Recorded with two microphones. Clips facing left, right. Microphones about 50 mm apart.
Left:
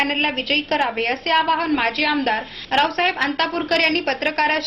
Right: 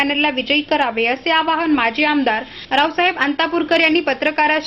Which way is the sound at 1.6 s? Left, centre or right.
Right.